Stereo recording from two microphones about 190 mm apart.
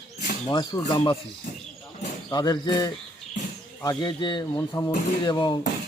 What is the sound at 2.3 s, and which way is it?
Speech, 20° left (ahead or behind).